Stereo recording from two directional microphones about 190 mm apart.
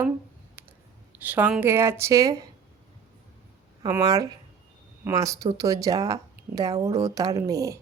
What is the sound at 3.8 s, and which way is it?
Speech, 20° right (ahead or behind).